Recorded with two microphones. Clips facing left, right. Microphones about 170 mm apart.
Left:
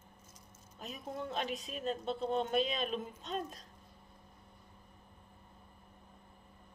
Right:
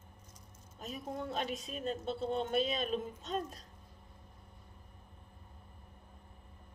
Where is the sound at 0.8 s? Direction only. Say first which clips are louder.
Right 1 dB; 40° right (ahead or behind).